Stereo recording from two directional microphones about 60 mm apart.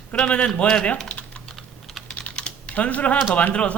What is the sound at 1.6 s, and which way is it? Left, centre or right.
Typing, centre.